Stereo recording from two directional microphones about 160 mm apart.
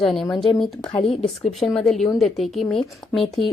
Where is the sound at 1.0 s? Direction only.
35° left (ahead or behind).